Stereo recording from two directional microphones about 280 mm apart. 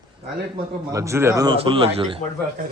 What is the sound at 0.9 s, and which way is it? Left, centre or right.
A man's voice, centre.